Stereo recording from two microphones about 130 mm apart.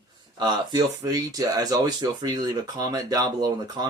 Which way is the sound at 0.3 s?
30° right (ahead or behind).